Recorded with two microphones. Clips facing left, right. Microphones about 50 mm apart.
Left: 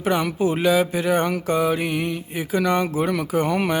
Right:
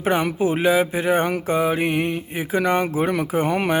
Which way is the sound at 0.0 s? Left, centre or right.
Right.